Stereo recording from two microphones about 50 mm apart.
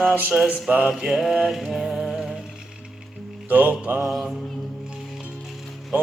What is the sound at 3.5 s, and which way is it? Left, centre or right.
Music, right.